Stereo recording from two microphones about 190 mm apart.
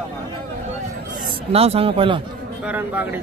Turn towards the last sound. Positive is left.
turn(degrees=-10)  # may be behind; listen again after turning